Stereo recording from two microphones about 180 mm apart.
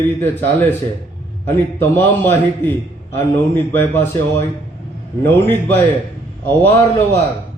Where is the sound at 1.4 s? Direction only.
15° left (ahead or behind).